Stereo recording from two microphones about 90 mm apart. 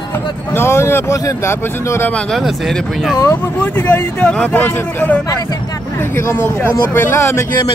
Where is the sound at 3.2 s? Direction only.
35° left (ahead or behind).